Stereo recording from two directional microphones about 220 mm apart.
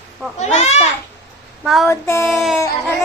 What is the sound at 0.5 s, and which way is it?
Speech, 30° left (ahead or behind).